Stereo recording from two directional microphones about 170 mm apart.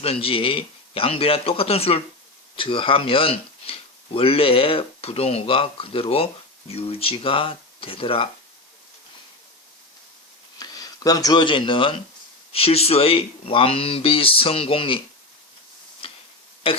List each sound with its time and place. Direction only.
0.0 s speech: 35° left (ahead or behind)
10.6 s speech: 20° left (ahead or behind)
16.0 s tick-tock: 30° left (ahead or behind)
16.7 s speech: 30° left (ahead or behind)